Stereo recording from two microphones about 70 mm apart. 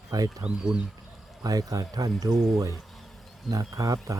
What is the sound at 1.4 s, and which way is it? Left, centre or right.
Speech, right.